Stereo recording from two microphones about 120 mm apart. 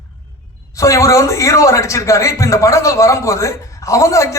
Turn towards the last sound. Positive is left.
turn(degrees=25)  # may be behind; listen again after turning